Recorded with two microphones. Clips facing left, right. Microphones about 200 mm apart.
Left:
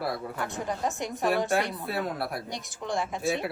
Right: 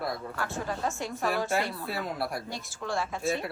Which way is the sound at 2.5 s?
15° left (ahead or behind).